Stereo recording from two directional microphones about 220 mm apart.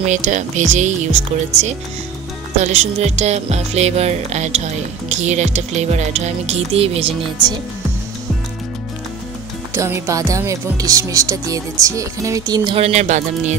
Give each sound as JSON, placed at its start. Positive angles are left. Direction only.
{"t": 0.0, "sound": "speech", "side_deg": -30}
{"t": 2.6, "sound": "speech", "side_deg": -30}
{"t": 9.8, "sound": "speech", "side_deg": -15}